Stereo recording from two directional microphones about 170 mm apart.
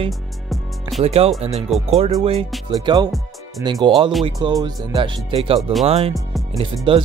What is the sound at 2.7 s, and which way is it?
Speech, 25° right (ahead or behind).